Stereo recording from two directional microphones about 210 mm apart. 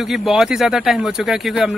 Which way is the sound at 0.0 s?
Centre (ahead or behind).